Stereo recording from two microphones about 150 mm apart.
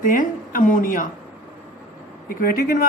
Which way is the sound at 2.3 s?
75° left (ahead or behind).